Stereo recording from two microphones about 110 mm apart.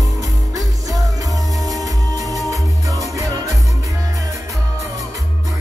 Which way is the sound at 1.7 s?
35° right (ahead or behind).